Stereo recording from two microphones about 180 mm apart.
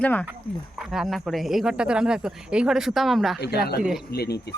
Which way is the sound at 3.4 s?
60° left (ahead or behind).